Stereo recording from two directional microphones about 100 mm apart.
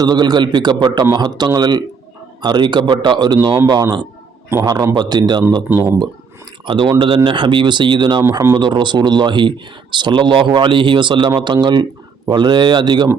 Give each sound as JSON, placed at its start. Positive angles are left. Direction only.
{"t": 0.0, "sound": "a man's voice", "side_deg": -45}
{"t": 5.6, "sound": "speech", "side_deg": -20}
{"t": 6.7, "sound": "speech", "side_deg": -55}
{"t": 8.3, "sound": "a man's voice", "side_deg": -35}
{"t": 8.6, "sound": "speech", "side_deg": -50}